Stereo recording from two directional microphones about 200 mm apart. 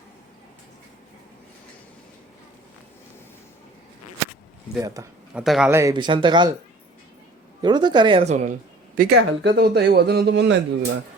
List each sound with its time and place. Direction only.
4.8 s speech: 15° right (ahead or behind)
5.4 s a man's voice: centre (ahead or behind)
5.7 s speech: 20° right (ahead or behind)
7.6 s speech: 20° right (ahead or behind)
9.0 s speech: 55° right (ahead or behind)